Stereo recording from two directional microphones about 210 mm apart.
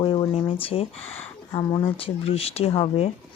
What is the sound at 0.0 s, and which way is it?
Speech, 25° left (ahead or behind).